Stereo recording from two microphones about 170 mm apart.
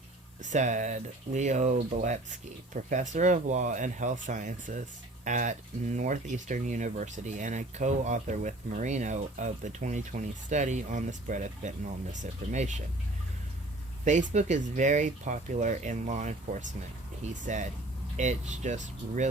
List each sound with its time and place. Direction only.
0.4 s speech: 45° right (ahead or behind)
14.0 s speech: 45° right (ahead or behind)